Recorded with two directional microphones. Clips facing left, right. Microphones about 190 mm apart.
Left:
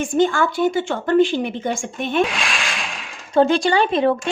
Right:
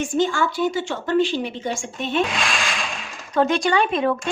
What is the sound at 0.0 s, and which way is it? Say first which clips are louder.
A woman's voice: left 3 dB; 55° left (ahead or behind).